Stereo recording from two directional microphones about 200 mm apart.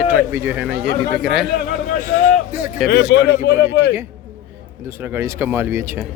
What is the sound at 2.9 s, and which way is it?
Speech, 55° left (ahead or behind).